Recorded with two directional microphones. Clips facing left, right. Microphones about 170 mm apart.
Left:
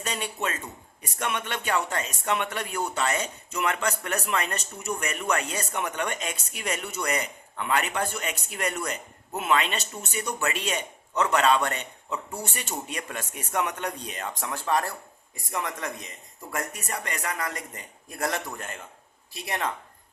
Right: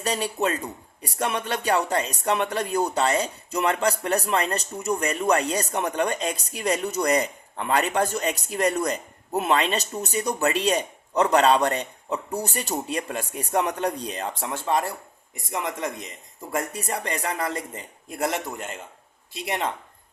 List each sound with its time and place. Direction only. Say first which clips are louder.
0.0 s a man's voice: right 6 dB; 35° right (ahead or behind); by 19.7 s 20° right (ahead or behind)